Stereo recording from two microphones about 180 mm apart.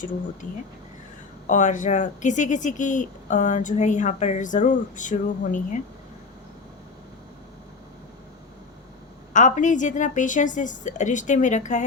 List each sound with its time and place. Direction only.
0.4 s speech: 45° left (ahead or behind)
9.3 s speech: 45° left (ahead or behind)